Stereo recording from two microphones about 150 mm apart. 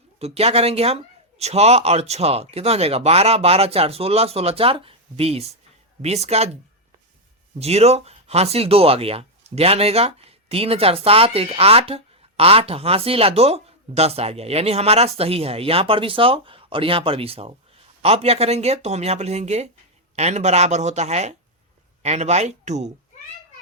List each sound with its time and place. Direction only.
0.2 s speech: 45° right (ahead or behind)
7.6 s speech: 45° right (ahead or behind)